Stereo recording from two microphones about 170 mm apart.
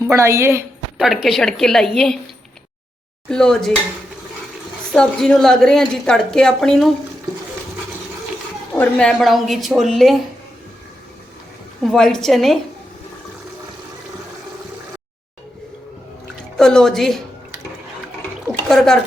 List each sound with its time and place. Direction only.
0.0 s a woman's voice: 15° right (ahead or behind)
0.9 s a woman's voice: centre (ahead or behind)
3.2 s a woman's voice: 5° left (ahead or behind)
4.9 s a woman's voice: 5° left (ahead or behind)
8.7 s a woman's voice: 5° left (ahead or behind)
11.8 s a woman's voice: centre (ahead or behind)
16.6 s a woman's voice: 5° left (ahead or behind)
18.4 s a sound: centre (ahead or behind)